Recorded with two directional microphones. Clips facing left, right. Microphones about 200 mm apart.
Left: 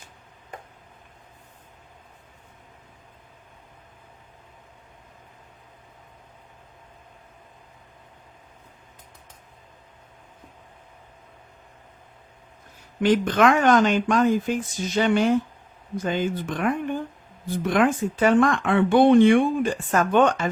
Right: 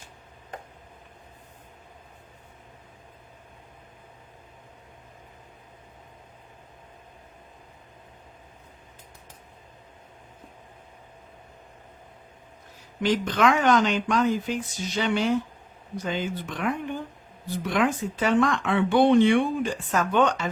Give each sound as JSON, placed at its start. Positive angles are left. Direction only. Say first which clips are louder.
{"t": 13.0, "sound": "speech", "louder": "left 4 dB", "side_deg": 50}